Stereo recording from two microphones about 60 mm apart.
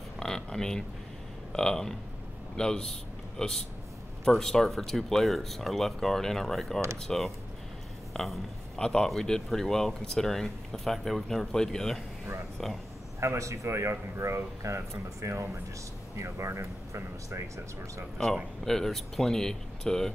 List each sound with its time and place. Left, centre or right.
0.2 s a sound: centre
1.5 s a man's voice: centre
8.1 s a sound: centre
8.8 s speech: centre
13.2 s speech: right
18.1 s speech: centre